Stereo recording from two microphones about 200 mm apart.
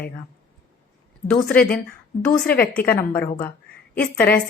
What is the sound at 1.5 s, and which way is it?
Speech, 5° left (ahead or behind).